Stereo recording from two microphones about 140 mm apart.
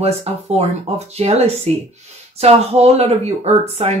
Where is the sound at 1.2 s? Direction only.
50° right (ahead or behind).